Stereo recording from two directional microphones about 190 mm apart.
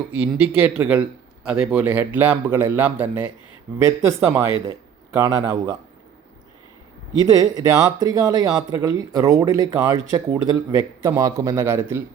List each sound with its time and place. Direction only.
0.3 s speech: 5° right (ahead or behind)
7.3 s speech: 20° right (ahead or behind)